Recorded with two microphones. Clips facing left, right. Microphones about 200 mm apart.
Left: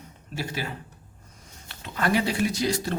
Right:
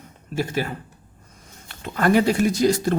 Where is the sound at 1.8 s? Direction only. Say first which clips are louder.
Right 7 dB; 50° right (ahead or behind).